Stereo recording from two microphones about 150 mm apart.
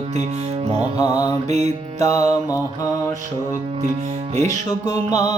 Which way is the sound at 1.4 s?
45° right (ahead or behind).